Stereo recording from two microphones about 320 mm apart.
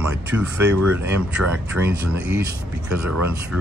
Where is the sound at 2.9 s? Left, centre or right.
Right.